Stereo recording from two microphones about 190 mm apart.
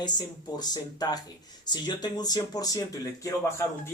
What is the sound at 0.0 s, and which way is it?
Speech, 20° left (ahead or behind).